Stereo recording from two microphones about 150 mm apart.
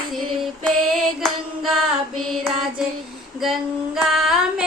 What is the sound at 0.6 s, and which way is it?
Music, 5° left (ahead or behind).